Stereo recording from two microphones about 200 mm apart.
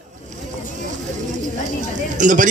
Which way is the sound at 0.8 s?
40° right (ahead or behind).